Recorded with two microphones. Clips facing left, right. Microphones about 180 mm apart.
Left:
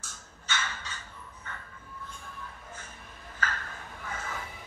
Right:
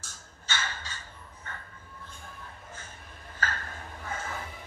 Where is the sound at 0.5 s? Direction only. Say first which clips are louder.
Even; 30° right (ahead or behind).